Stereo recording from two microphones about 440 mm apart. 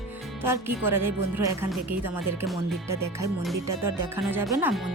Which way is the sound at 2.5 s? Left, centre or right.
Centre.